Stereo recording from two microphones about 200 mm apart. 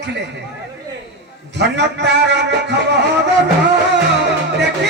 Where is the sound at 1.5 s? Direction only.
60° right (ahead or behind).